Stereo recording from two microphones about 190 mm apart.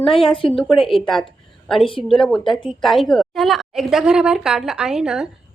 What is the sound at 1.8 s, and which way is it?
Speech, 25° left (ahead or behind).